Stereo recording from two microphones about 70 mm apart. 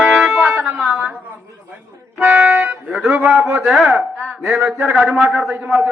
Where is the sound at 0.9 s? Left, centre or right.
Right.